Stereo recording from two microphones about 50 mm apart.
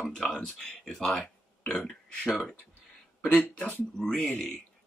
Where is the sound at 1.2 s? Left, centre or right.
Left.